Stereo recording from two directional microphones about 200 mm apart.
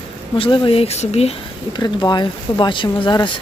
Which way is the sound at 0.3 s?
25° left (ahead or behind).